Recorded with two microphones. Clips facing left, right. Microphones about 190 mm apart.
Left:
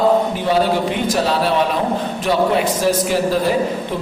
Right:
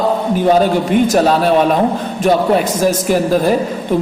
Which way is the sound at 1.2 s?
50° right (ahead or behind).